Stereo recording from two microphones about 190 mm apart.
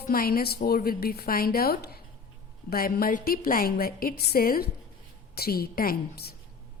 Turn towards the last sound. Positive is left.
turn(degrees=55)  # may be behind; listen again after turning